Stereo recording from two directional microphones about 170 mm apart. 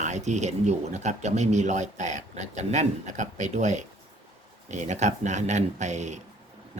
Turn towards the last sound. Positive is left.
turn(degrees=-45)  # may be behind; listen again after turning